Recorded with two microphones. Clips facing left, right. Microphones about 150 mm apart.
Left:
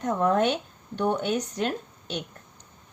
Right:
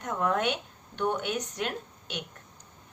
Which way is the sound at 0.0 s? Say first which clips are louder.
Left 5 dB; 35° left (ahead or behind).